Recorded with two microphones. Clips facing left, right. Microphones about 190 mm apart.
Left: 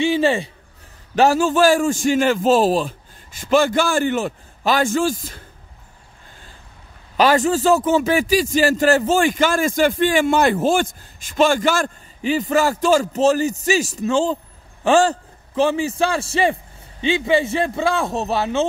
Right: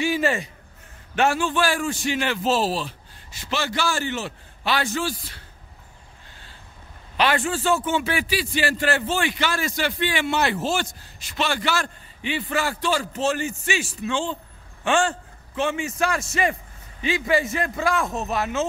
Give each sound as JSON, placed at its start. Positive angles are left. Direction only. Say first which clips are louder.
{"t": 0.0, "sound": "a sound", "louder": "left 5 dB", "side_deg": 30}
{"t": 1.1, "sound": "a man's voice", "louder": "left 6 dB", "side_deg": 40}
{"t": 7.2, "sound": "a man's voice", "louder": "left 7 dB", "side_deg": 40}